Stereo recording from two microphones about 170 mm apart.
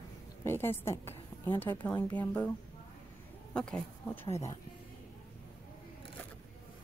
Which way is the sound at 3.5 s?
5° left (ahead or behind).